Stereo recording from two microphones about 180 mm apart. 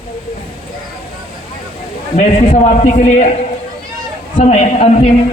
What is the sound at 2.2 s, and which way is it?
A man's voice, 40° left (ahead or behind).